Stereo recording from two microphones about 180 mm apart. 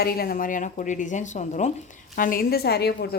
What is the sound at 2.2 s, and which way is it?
Speech, 55° left (ahead or behind).